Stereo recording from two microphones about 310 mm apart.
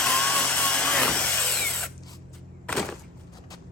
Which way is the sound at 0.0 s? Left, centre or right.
Centre.